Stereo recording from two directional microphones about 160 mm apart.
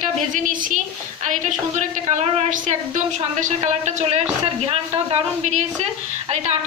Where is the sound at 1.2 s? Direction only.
50° right (ahead or behind).